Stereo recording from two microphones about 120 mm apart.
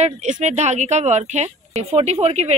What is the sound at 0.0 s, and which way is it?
Speech, 80° right.